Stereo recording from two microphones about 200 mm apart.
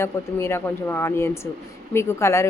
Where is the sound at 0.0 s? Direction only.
10° left (ahead or behind).